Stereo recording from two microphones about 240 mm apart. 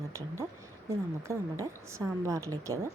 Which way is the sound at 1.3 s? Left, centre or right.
Centre.